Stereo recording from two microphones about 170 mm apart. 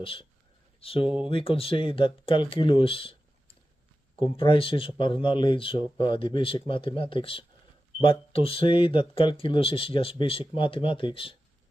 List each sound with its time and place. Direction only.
0.0 s speech: 30° left (ahead or behind)